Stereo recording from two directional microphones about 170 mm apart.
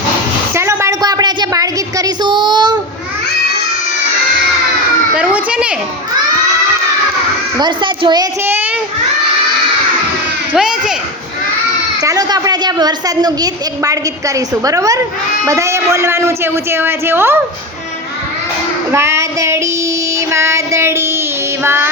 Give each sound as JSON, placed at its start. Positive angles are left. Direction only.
{"t": 0.5, "sound": "a sound", "side_deg": -15}
{"t": 5.1, "sound": "children playing", "side_deg": -10}
{"t": 7.6, "sound": "a child's voice", "side_deg": -25}
{"t": 8.4, "sound": "children playing", "side_deg": -10}
{"t": 10.5, "sound": "speech", "side_deg": -5}
{"t": 12.0, "sound": "a woman's voice", "side_deg": -20}
{"t": 18.9, "sound": "a woman's voice", "side_deg": -15}